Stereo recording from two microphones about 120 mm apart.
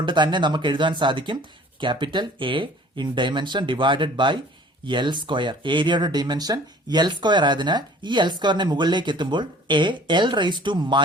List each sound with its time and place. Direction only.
0.0 s speech: 40° right (ahead or behind)